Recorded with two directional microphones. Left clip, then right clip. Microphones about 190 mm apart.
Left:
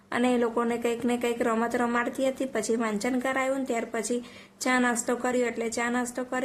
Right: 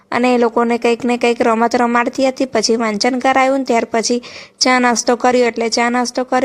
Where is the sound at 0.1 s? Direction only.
35° right (ahead or behind).